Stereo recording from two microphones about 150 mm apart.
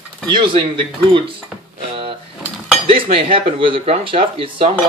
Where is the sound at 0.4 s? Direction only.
35° right (ahead or behind).